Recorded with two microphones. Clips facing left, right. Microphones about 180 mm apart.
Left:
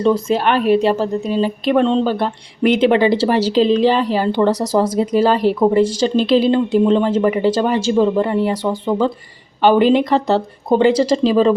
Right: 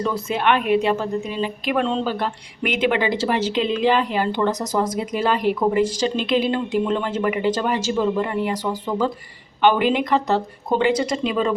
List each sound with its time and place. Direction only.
0.0 s a woman's voice: 30° left (ahead or behind)